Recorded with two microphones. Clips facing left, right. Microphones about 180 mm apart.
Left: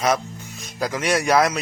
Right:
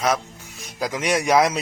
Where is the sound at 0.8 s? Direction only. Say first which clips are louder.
Left 1 dB; 15° right (ahead or behind).